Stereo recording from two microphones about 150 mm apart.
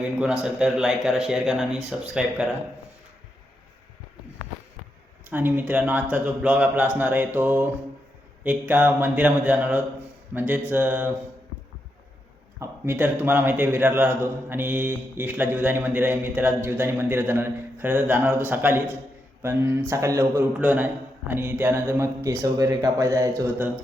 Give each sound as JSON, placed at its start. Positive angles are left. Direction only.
{"t": 0.2, "sound": "speech", "side_deg": -5}
{"t": 5.3, "sound": "a man's voice", "side_deg": -15}
{"t": 12.5, "sound": "a man's voice", "side_deg": -15}